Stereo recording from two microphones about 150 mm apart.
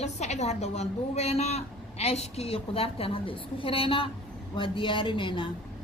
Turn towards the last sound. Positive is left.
turn(degrees=35)  # may be behind; listen again after turning